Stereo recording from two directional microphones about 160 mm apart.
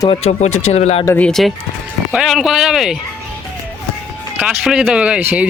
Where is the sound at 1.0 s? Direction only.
15° left (ahead or behind).